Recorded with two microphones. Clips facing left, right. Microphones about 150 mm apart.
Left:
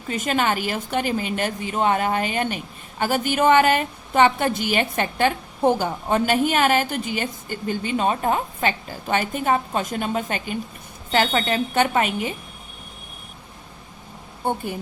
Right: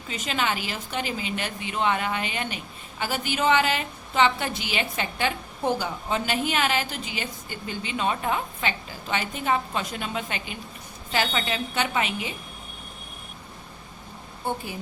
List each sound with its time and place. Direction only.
0.1 s a woman's voice: 50° left (ahead or behind)
14.4 s a woman's voice: 55° left (ahead or behind)